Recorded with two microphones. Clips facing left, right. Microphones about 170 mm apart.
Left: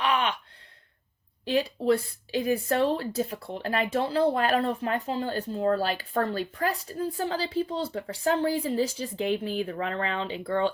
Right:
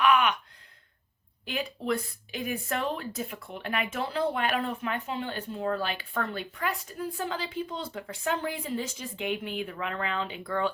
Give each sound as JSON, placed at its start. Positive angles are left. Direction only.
{"t": 0.0, "sound": "gasp", "side_deg": 30}
{"t": 1.5, "sound": "speech", "side_deg": 30}